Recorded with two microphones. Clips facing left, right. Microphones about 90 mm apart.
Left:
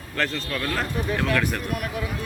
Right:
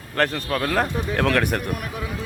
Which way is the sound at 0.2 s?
55° right (ahead or behind).